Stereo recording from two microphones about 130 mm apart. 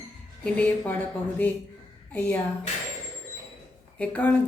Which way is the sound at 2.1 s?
10° left (ahead or behind).